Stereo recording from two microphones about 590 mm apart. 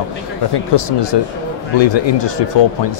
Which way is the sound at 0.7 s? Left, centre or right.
Left.